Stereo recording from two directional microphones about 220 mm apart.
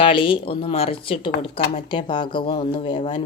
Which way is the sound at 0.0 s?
25° left (ahead or behind).